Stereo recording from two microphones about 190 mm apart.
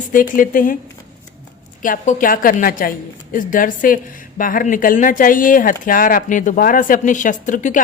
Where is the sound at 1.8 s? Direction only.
45° left (ahead or behind).